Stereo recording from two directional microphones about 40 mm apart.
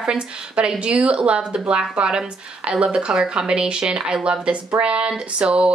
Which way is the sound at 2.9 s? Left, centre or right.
Centre.